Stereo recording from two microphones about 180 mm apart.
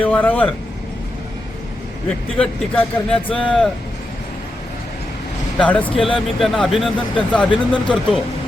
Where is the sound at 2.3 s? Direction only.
5° left (ahead or behind).